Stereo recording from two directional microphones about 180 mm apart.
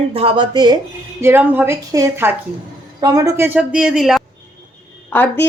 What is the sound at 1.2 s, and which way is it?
A woman's voice, 10° right (ahead or behind).